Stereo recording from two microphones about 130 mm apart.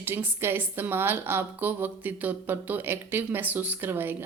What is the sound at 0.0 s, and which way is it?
A woman's voice, 15° right (ahead or behind).